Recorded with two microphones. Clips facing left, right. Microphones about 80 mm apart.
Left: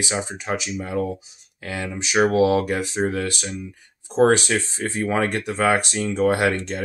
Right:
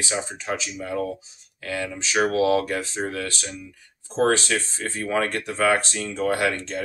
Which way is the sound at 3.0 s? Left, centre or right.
Left.